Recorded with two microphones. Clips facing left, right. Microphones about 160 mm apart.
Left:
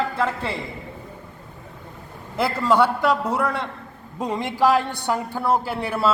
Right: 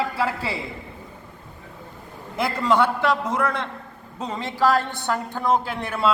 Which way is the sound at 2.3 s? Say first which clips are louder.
Left 1 dB; 5° left (ahead or behind).